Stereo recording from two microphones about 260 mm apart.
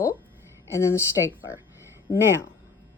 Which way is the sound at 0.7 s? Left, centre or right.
Centre.